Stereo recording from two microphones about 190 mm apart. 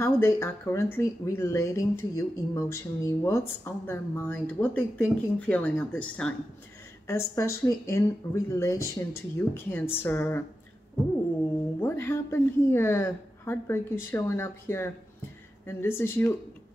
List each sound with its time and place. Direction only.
0.0 s a woman's voice: 15° left (ahead or behind)
11.8 s a woman's voice: 10° left (ahead or behind)